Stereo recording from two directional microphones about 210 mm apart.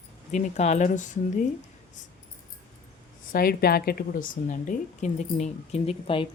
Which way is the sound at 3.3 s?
45° left (ahead or behind).